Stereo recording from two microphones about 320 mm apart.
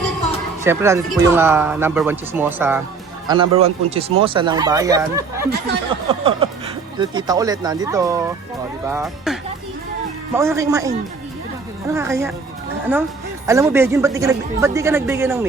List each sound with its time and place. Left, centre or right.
0.6 s speech: centre
6.1 s chuckle: centre
7.0 s speech: centre
13.5 s speech: centre